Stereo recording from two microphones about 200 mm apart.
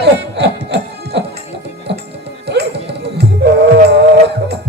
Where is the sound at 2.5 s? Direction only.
55° right (ahead or behind).